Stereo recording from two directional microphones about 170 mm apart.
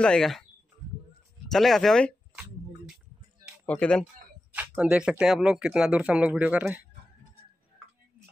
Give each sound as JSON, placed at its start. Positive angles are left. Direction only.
{"t": 0.0, "sound": "speech", "side_deg": 5}
{"t": 1.5, "sound": "speech", "side_deg": 0}
{"t": 3.6, "sound": "speech", "side_deg": 5}
{"t": 4.6, "sound": "speech", "side_deg": -5}